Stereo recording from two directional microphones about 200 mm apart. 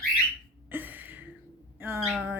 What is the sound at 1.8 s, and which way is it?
Owl, 10° right (ahead or behind).